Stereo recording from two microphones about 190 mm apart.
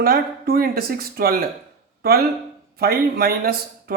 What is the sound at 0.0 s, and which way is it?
A man's voice, 50° right (ahead or behind).